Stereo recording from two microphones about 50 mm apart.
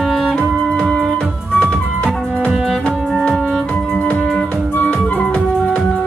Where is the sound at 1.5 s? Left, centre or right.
Left.